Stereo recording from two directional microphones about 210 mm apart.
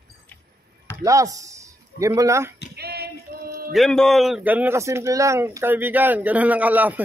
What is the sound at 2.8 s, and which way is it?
Female singing, 50° right (ahead or behind).